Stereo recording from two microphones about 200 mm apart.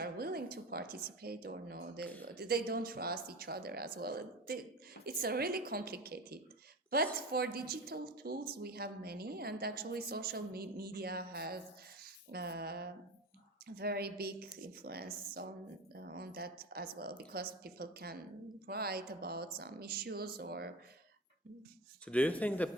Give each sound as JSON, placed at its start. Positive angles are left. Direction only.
{"t": 0.0, "sound": "a woman's voice", "side_deg": -50}
{"t": 22.0, "sound": "speech", "side_deg": 5}